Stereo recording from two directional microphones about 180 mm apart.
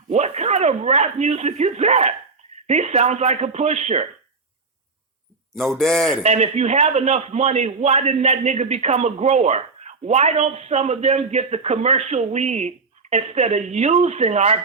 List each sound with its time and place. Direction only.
0.1 s a man's voice: 40° right (ahead or behind)
5.5 s a man's voice: centre (ahead or behind)
6.2 s a man's voice: 35° right (ahead or behind)